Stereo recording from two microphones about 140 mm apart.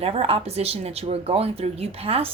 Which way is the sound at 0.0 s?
45° right (ahead or behind).